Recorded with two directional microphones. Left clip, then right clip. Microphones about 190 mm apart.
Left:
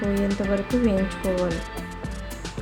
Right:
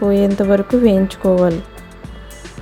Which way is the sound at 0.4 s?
40° right (ahead or behind).